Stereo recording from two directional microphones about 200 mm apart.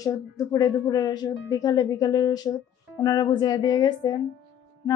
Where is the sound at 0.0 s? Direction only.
15° left (ahead or behind).